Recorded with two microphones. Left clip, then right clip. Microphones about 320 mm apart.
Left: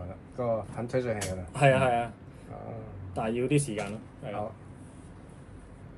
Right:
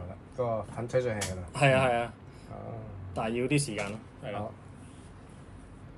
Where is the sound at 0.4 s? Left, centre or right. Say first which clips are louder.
Left 1 dB; centre.